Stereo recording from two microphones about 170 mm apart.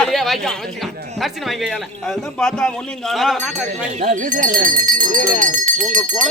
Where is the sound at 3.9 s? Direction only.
45° right (ahead or behind).